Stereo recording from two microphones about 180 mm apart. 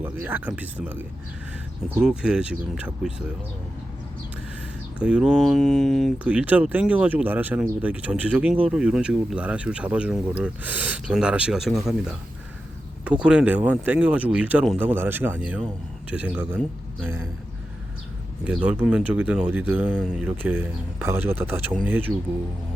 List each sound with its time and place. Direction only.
0.0 s speech: 10° right (ahead or behind)
4.9 s speech: 5° right (ahead or behind)
13.1 s speech: 5° right (ahead or behind)
18.4 s speech: 5° right (ahead or behind)